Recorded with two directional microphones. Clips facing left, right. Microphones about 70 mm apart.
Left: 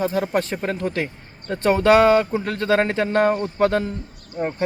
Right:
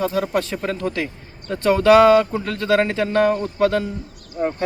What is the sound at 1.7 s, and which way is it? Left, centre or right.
Speech, left.